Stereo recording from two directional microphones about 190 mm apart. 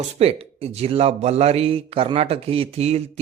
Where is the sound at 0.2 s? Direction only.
35° right (ahead or behind).